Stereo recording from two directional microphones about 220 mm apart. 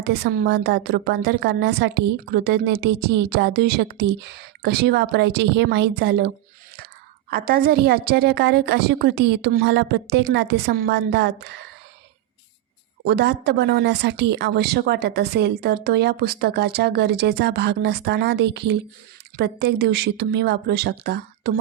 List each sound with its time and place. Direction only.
0.0 s speech: 50° right (ahead or behind)
13.1 s speech: 50° right (ahead or behind)